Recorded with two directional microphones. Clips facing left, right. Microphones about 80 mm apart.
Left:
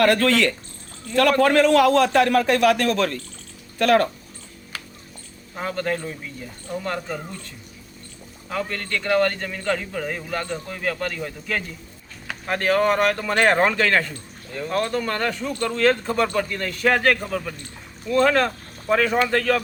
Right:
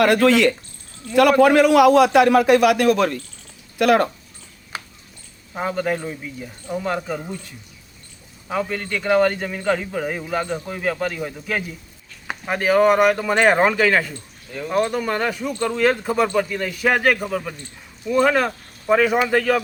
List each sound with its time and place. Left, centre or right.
0.0 s a man's voice: centre
4.7 s music: right
5.5 s a man's voice: centre